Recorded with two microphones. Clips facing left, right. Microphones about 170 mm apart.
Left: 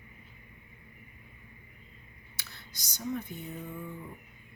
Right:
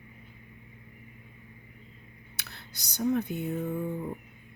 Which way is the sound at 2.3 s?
65° right (ahead or behind).